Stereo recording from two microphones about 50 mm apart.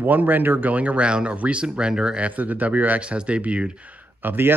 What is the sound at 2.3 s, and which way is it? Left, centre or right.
Speech, right.